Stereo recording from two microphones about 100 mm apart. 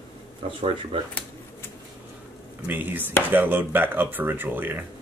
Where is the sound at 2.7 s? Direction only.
20° right (ahead or behind).